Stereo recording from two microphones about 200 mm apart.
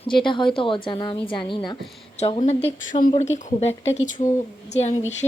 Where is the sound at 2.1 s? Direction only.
35° left (ahead or behind).